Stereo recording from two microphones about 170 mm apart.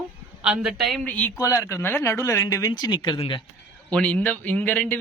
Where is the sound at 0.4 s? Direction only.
5° right (ahead or behind); by 3.4 s 25° left (ahead or behind).